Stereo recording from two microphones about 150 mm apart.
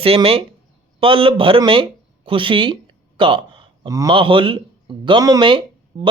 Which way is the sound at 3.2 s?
35° right (ahead or behind).